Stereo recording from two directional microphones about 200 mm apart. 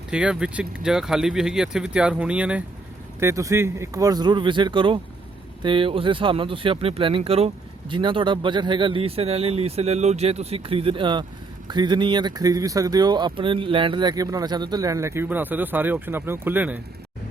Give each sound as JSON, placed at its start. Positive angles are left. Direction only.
{"t": 0.1, "sound": "speech", "side_deg": -5}